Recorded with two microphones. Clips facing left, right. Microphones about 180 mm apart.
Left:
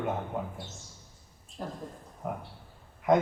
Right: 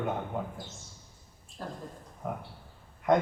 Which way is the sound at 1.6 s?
20° left (ahead or behind).